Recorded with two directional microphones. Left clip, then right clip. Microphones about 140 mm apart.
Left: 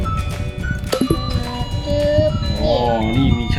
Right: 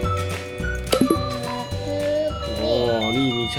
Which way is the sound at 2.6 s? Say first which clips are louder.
Left 4 dB; 5° left (ahead or behind).